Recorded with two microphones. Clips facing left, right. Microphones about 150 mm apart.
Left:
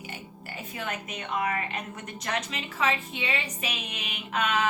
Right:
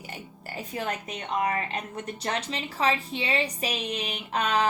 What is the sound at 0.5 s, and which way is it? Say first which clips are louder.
A woman's voice: right 3 dB; 35° right (ahead or behind).